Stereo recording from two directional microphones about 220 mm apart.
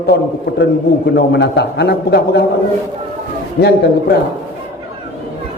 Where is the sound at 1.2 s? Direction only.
50° left (ahead or behind).